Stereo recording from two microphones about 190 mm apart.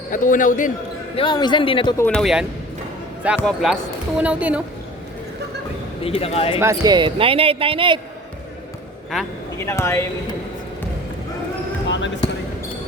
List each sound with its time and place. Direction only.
0.1 s speech: 45° left (ahead or behind)
1.1 s speech: 25° left (ahead or behind)
2.0 s a woman's voice: 5° left (ahead or behind)
6.0 s speech: 30° left (ahead or behind)
6.6 s a man's voice: 15° right (ahead or behind)
9.6 s a man's voice: 15° left (ahead or behind)